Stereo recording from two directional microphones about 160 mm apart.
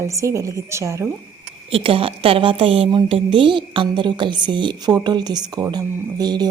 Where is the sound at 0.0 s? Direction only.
20° right (ahead or behind).